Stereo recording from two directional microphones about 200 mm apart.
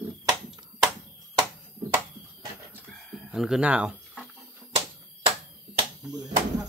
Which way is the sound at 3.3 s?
Centre (ahead or behind).